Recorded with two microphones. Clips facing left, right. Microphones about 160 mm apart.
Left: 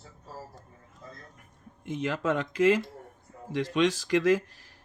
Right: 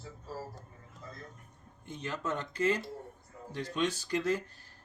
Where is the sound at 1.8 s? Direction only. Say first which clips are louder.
Left 8 dB; 90° left.